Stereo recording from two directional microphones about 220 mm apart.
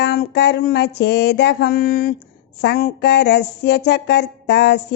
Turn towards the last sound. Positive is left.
turn(degrees=50)  # may be behind; listen again after turning